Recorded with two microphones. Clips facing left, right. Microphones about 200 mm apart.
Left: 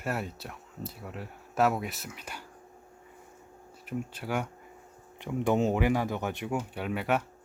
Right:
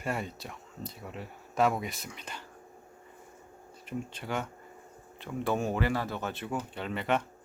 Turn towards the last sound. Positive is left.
turn(degrees=10)  # may be behind; listen again after turning